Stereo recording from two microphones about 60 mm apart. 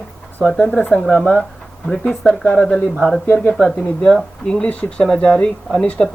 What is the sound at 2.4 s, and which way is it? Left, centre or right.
Speech, centre.